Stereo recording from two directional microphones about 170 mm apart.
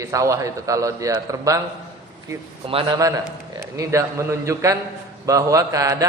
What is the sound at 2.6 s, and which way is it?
Speech, 30° right (ahead or behind).